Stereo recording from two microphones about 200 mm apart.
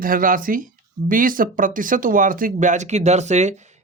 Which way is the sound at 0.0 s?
45° right (ahead or behind).